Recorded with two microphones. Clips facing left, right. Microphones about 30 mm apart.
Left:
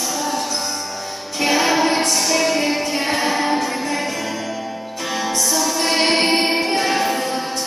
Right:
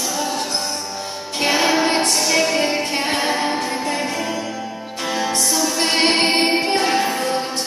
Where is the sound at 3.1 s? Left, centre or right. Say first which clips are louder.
Left 2 dB; right.